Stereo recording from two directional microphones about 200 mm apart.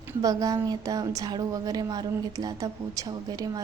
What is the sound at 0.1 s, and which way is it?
A woman's voice, 15° right (ahead or behind).